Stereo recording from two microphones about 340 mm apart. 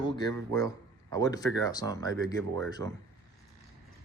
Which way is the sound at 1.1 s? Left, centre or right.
Centre.